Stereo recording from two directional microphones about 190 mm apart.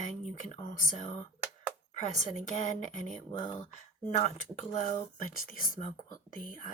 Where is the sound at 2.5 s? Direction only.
40° left (ahead or behind).